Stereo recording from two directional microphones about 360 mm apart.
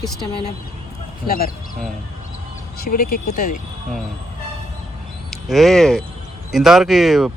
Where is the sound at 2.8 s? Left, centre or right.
Left.